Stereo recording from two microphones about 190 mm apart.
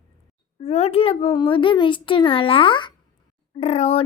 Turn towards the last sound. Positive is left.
turn(degrees=35)  # may be behind; listen again after turning